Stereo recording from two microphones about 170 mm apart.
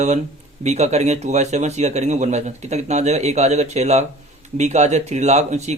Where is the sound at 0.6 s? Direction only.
40° right (ahead or behind).